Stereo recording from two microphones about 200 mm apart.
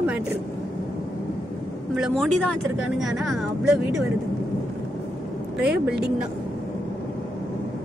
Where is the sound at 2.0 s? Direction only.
Centre (ahead or behind).